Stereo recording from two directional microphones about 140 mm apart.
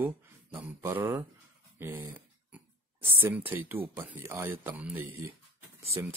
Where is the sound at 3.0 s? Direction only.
15° right (ahead or behind).